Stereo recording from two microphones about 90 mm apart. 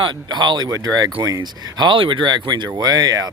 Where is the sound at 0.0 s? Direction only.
55° right (ahead or behind).